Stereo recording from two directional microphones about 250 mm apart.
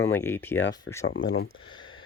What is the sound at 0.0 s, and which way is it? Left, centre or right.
Speech, centre.